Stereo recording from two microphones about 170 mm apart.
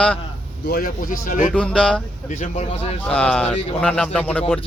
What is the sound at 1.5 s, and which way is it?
Speech, 5° left (ahead or behind).